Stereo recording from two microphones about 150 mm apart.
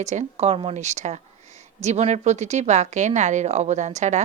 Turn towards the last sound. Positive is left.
turn(degrees=-50)  # may be behind; listen again after turning